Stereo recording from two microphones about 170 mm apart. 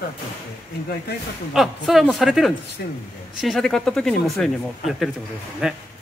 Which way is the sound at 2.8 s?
70° left (ahead or behind).